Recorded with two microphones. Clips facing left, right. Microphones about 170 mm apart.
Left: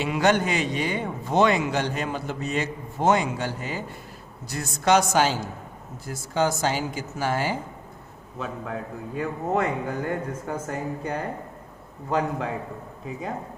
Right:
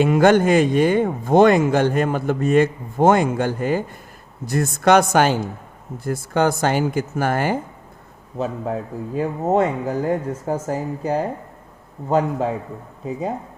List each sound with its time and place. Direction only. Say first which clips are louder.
0.0 s speech: right 8 dB; 50° right (ahead or behind)
8.4 s a man's voice: right 7 dB; 30° right (ahead or behind)